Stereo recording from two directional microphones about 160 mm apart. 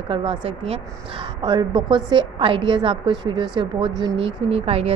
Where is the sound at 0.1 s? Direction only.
35° right (ahead or behind).